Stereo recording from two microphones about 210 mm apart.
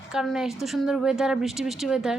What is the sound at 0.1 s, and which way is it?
A woman's voice, centre (ahead or behind).